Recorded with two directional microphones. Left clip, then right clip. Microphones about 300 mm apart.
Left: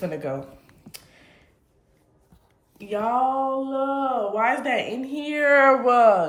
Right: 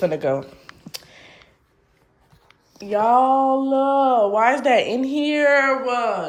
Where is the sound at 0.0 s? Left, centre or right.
Centre.